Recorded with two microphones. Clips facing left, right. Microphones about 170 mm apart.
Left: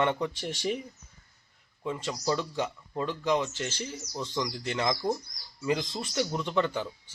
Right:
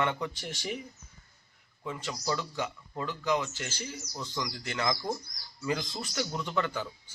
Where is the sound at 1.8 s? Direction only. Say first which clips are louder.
Left 4 dB; 25° left (ahead or behind).